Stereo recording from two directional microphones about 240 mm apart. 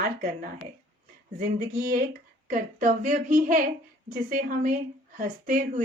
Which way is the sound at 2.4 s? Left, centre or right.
Right.